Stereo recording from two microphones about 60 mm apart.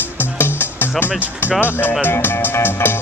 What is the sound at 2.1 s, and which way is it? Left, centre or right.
Music, left.